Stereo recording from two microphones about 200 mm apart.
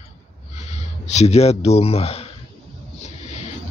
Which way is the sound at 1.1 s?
30° left (ahead or behind).